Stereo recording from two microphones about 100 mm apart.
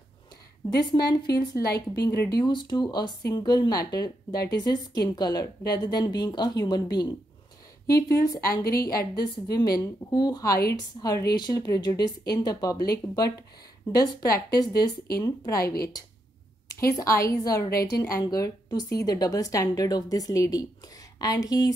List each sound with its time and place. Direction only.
0.7 s a woman's voice: 40° left (ahead or behind)
7.8 s a woman's voice: 35° left (ahead or behind)